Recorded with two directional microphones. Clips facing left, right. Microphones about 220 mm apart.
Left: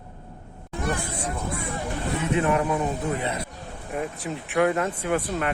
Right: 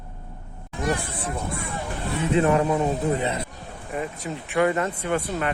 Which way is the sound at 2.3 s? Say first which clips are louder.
Right 4 dB; 30° right (ahead or behind).